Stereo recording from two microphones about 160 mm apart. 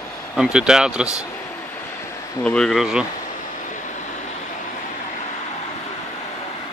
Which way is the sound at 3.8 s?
50° left (ahead or behind).